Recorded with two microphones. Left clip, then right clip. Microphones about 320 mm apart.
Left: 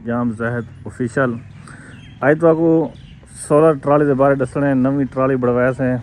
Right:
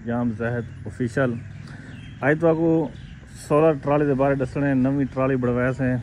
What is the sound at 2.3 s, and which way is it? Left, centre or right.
Speech, left.